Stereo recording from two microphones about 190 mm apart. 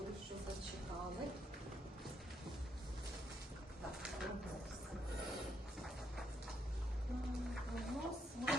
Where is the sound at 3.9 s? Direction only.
Centre (ahead or behind).